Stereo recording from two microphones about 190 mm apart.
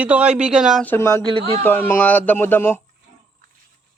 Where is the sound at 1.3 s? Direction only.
30° right (ahead or behind).